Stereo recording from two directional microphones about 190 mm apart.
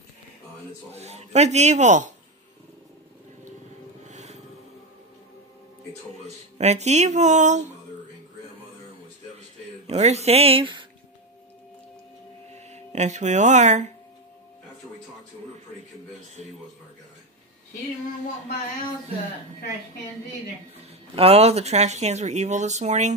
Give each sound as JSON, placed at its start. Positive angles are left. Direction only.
{"t": 0.9, "sound": "speech", "side_deg": -35}
{"t": 4.1, "sound": "music", "side_deg": -35}
{"t": 6.6, "sound": "speech", "side_deg": -35}
{"t": 9.8, "sound": "speech", "side_deg": -35}
{"t": 12.5, "sound": "speech", "side_deg": -35}
{"t": 21.1, "sound": "speech", "side_deg": -30}